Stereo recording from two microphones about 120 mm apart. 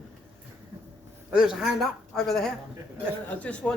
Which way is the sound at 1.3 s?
5° right (ahead or behind).